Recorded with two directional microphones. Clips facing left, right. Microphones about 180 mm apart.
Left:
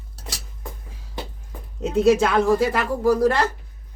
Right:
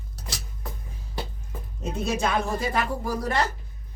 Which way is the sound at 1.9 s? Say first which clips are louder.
Left 9 dB; 90° left.